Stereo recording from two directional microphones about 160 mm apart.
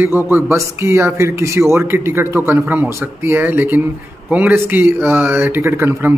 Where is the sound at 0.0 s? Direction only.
15° right (ahead or behind).